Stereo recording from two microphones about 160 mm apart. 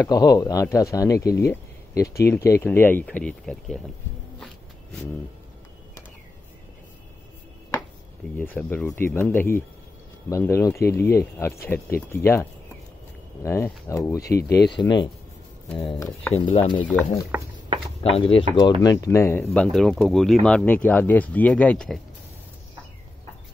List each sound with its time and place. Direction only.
0.0 s speech: 25° left (ahead or behind); by 3.9 s centre (ahead or behind)
8.4 s speech: 10° left (ahead or behind)
14.8 s speech: 30° left (ahead or behind)
18.0 s speech: 35° left (ahead or behind); by 19.4 s 15° left (ahead or behind)
19.4 s speech: 5° left (ahead or behind)